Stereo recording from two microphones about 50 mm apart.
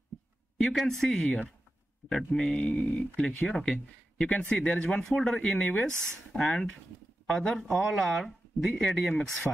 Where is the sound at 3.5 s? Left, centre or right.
Centre.